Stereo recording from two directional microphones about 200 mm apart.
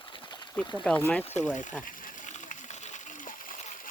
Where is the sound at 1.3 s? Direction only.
40° left (ahead or behind).